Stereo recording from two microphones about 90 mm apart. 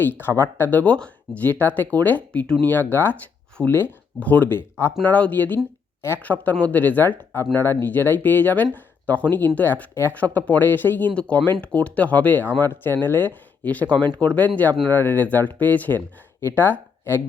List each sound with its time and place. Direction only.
0.0 s speech: 25° left (ahead or behind)